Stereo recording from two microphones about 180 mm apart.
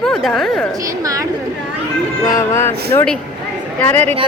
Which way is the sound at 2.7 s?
65° right (ahead or behind).